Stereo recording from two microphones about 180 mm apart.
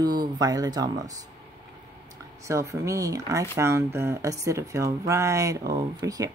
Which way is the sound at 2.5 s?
15° right (ahead or behind).